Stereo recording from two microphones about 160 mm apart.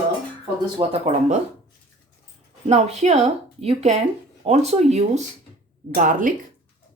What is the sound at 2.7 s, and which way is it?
Speech, 45° right (ahead or behind).